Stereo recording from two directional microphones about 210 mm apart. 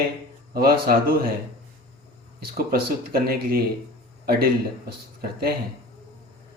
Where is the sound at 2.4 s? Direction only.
45° right (ahead or behind).